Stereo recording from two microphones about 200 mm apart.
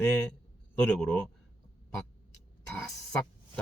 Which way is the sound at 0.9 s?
5° left (ahead or behind).